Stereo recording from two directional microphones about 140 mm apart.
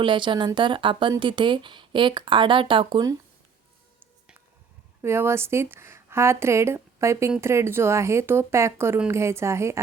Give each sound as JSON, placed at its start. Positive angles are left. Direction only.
{"t": 0.0, "sound": "speech", "side_deg": -35}
{"t": 5.0, "sound": "speech", "side_deg": -20}